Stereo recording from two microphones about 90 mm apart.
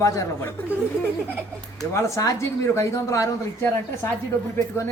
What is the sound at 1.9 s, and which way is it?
A man's voice, 35° left (ahead or behind).